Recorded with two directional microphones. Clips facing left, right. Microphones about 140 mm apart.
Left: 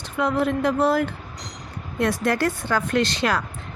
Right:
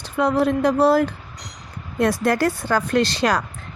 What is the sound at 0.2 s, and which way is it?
Speech, 35° right (ahead or behind).